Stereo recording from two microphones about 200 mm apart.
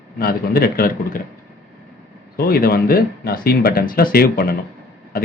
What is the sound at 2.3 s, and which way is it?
Speech, 50° left (ahead or behind).